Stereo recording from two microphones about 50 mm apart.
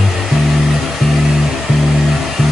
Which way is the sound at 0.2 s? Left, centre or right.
Centre.